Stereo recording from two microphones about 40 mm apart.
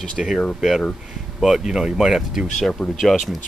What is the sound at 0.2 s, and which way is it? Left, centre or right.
Speech, right.